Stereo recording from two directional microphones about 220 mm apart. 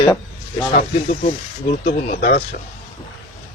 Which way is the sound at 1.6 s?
40° left (ahead or behind).